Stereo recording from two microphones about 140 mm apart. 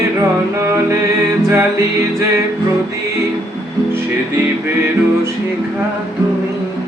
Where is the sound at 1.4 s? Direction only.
20° right (ahead or behind).